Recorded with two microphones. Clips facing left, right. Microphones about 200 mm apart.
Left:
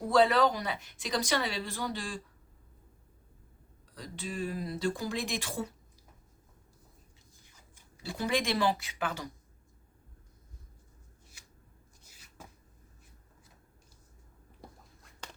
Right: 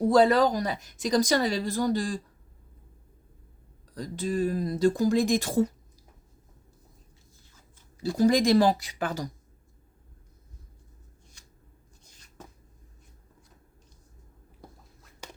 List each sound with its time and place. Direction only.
0.1 s speech: 40° right (ahead or behind)
3.9 s speech: 40° right (ahead or behind)
8.1 s speech: 40° right (ahead or behind)
12.0 s a sound: 5° left (ahead or behind)
15.2 s walk: 10° right (ahead or behind)